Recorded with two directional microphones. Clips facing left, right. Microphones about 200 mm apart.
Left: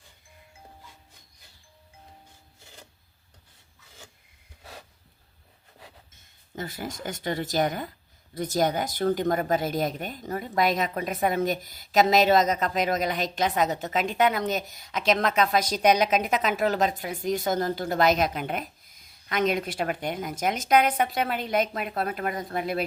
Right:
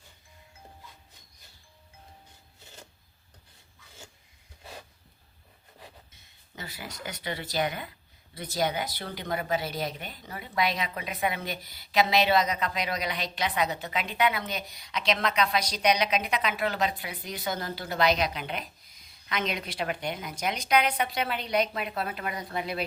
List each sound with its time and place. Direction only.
6.1 s a woman's voice: 50° left (ahead or behind)